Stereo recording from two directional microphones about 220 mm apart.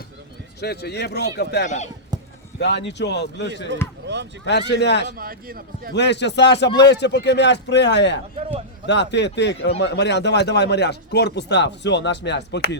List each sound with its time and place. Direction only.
0.6 s speech: 45° left (ahead or behind)
4.0 s a sound: 50° right (ahead or behind)
4.4 s speech: 50° left (ahead or behind)
5.1 s a man's voice: 40° right (ahead or behind)
5.9 s speech: 50° left (ahead or behind)